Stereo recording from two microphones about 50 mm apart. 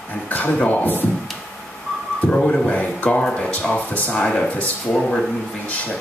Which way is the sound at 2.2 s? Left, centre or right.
Left.